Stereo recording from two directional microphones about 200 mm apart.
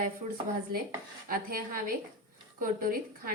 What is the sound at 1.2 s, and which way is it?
A woman's voice, 45° right (ahead or behind).